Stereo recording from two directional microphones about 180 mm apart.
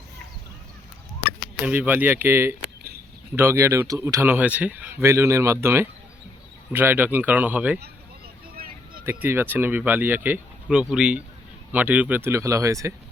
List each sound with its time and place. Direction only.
1.6 s speech: 10° right (ahead or behind)
9.2 s speech: 10° right (ahead or behind)